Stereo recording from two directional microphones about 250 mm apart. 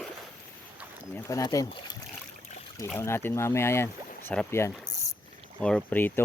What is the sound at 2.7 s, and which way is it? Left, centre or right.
Speech, centre.